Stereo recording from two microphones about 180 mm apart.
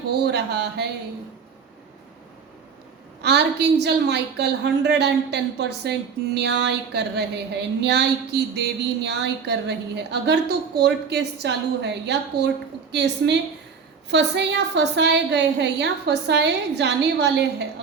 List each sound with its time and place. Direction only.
0.1 s a woman's voice: 70° right (ahead or behind)
3.2 s a woman's voice: 70° right (ahead or behind)